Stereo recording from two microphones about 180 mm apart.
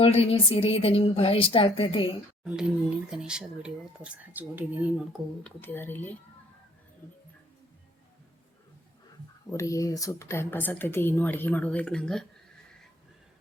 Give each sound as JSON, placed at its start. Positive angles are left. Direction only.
{"t": 0.0, "sound": "a woman's voice", "side_deg": 35}
{"t": 2.4, "sound": "speech", "side_deg": -5}
{"t": 5.4, "sound": "speech", "side_deg": 10}
{"t": 9.5, "sound": "speech", "side_deg": 15}